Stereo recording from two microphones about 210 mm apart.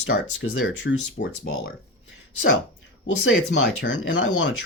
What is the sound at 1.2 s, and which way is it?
Speech, 50° left (ahead or behind).